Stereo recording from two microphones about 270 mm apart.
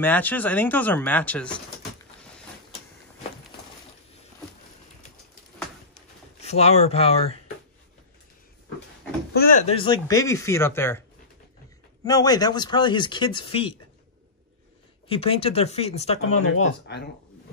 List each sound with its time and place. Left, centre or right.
0.0 s speech: centre
6.4 s speech: left
9.3 s speech: left; by 11.0 s centre
12.0 s speech: centre
15.0 s speech: left
16.9 s speech: left